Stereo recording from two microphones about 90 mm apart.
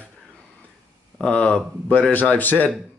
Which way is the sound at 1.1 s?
10° left (ahead or behind).